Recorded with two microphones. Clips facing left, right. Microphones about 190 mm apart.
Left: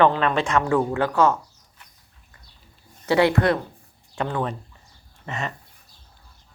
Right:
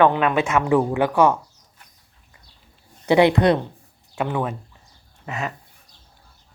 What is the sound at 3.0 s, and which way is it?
A woman's voice, 20° right (ahead or behind).